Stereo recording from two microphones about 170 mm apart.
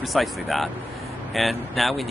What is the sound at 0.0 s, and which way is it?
Speech, centre (ahead or behind).